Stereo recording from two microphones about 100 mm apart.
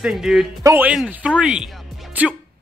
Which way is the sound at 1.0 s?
10° right (ahead or behind).